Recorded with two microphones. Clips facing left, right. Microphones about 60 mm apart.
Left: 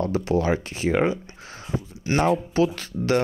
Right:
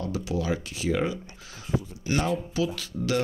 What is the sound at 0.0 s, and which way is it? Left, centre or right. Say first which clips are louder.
Speech: left 7 dB; left.